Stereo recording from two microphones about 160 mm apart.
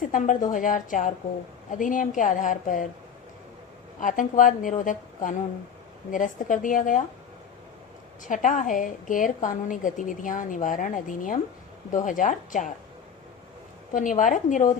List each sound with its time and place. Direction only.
0.1 s a woman's voice: 55° left (ahead or behind)
4.0 s a woman's voice: 55° left (ahead or behind)
8.2 s a woman's voice: 55° left (ahead or behind)
13.9 s a woman's voice: 55° left (ahead or behind)